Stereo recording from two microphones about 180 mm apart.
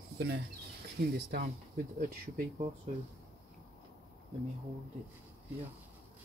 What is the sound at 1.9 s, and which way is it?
Speech, 45° right (ahead or behind).